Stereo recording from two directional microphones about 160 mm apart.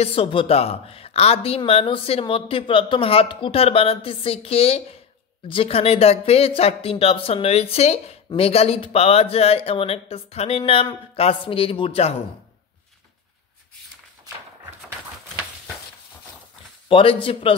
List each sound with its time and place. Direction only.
0.0 s speech: 35° left (ahead or behind)
16.9 s speech: 35° left (ahead or behind)